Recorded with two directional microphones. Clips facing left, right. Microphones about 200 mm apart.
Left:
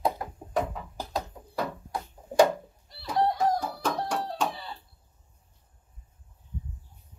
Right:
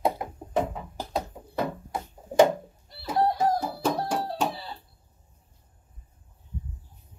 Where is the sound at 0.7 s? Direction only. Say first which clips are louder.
Right 2 dB; 15° right (ahead or behind).